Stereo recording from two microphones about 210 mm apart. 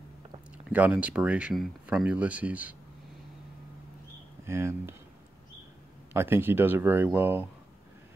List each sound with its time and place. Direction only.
0.7 s speech: 10° right (ahead or behind)
4.5 s speech: 10° right (ahead or behind)
6.1 s speech: 10° right (ahead or behind)